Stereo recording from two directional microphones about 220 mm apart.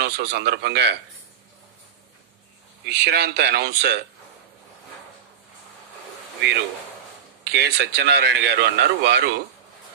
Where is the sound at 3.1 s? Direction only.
50° right (ahead or behind).